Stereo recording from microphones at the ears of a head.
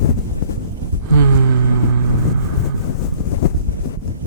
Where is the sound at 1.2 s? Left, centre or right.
Right.